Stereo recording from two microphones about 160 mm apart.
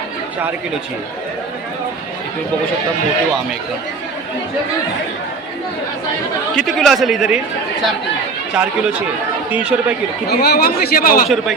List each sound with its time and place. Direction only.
6.6 s a man's voice: centre (ahead or behind)
9.5 s speech: 10° right (ahead or behind)
10.2 s speech: 80° left; by 11.3 s 65° left (ahead or behind)